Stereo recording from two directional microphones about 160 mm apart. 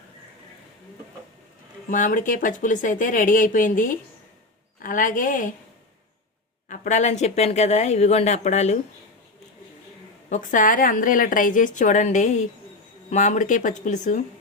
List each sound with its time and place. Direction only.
1.9 s a woman's voice: 55° left (ahead or behind)
6.7 s speech: 50° left (ahead or behind)
10.2 s a woman's voice: 50° left (ahead or behind)